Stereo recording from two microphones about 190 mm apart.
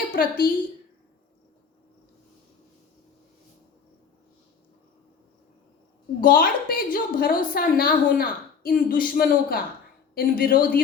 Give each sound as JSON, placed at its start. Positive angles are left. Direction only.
{"t": 0.1, "sound": "a woman's voice", "side_deg": 50}
{"t": 6.1, "sound": "a woman's voice", "side_deg": 50}